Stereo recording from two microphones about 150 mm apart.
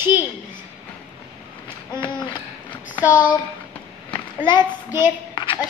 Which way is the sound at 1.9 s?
30° left (ahead or behind).